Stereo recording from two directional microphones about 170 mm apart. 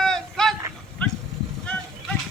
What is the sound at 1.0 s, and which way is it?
Goat, 5° left (ahead or behind).